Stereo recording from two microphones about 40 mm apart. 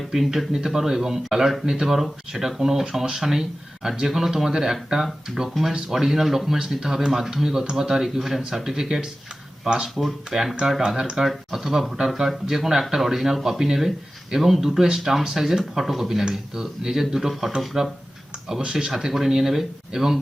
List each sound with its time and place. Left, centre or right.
0.1 s speech: centre
11.2 s speech: centre